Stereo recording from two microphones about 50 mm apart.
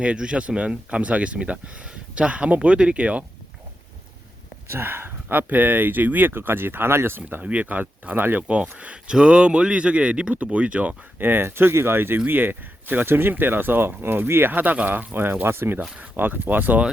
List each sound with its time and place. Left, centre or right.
0.0 s speech: right
4.7 s speech: right
7.2 s speech: right
8.4 s speech: right
11.2 s speech: right
14.5 s speech: right
16.0 s speech: right